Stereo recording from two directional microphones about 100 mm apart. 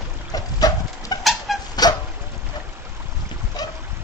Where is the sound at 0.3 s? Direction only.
40° left (ahead or behind).